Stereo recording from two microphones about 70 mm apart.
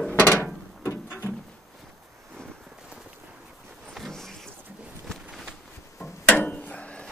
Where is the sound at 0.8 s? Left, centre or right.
Left.